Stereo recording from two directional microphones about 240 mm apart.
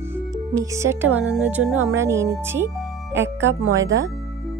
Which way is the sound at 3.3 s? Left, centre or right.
Right.